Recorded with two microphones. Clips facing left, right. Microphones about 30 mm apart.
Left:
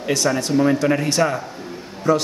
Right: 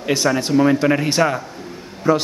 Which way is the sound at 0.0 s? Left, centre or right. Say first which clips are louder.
Right 2 dB; right.